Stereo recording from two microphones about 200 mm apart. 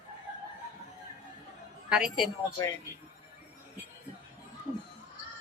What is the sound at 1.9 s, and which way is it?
Speech, 5° right (ahead or behind).